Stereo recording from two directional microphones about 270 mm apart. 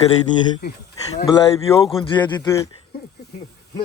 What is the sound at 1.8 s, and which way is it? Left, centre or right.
Speech, centre.